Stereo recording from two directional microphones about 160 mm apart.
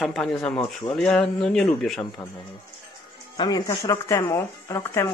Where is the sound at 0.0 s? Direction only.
5° left (ahead or behind).